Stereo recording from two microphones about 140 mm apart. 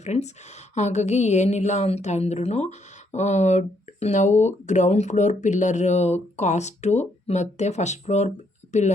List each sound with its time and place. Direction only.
0.0 s a woman's voice: 55° left (ahead or behind)